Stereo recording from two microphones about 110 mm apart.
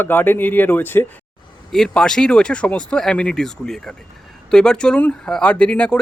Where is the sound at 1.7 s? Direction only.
5° left (ahead or behind).